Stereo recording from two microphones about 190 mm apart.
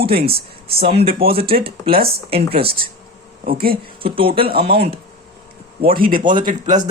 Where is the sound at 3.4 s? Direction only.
50° right (ahead or behind).